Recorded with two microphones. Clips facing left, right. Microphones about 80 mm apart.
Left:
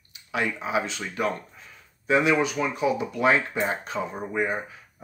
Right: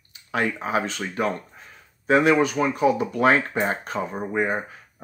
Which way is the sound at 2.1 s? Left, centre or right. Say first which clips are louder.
Right 4 dB; right.